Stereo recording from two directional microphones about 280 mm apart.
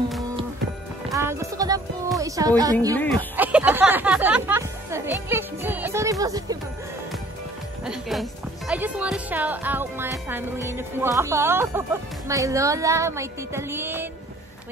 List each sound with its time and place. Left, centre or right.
1.1 s music: centre
2.1 s speech: centre
7.8 s speech: centre